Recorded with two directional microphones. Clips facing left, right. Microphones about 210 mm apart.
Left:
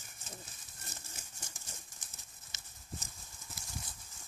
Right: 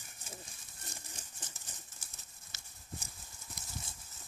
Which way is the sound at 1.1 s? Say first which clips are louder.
Even; 10° left (ahead or behind).